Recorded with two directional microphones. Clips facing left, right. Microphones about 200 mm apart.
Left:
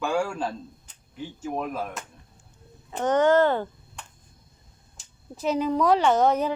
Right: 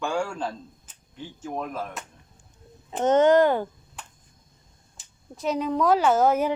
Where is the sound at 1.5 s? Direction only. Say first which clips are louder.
Left 1 dB; 10° left (ahead or behind).